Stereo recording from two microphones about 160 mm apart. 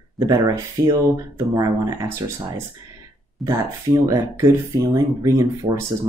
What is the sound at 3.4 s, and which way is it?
Speech, 20° right (ahead or behind).